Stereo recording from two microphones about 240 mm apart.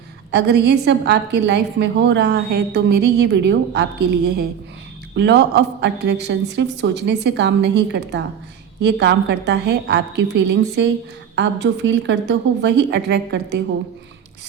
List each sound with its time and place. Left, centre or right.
0.3 s a woman's voice: right